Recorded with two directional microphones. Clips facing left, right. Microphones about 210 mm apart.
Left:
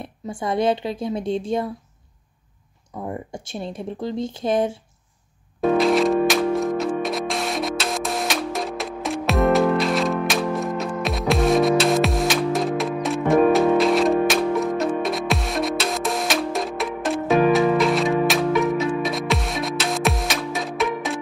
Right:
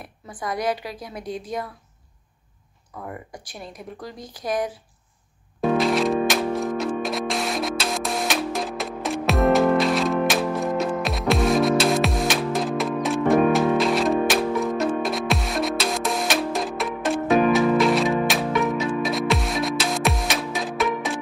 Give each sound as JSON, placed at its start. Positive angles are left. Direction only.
{"t": 0.0, "sound": "speech", "side_deg": 25}
{"t": 3.0, "sound": "speech", "side_deg": 25}
{"t": 5.6, "sound": "music", "side_deg": 0}